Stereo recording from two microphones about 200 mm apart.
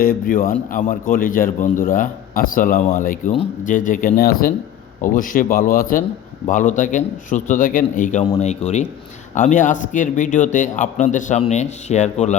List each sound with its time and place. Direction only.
0.0 s a man's voice: 45° left (ahead or behind)